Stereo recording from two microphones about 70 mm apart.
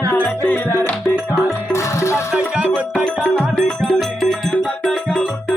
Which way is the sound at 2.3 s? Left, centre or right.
Centre.